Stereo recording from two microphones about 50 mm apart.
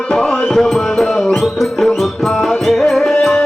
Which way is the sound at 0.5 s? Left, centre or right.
Centre.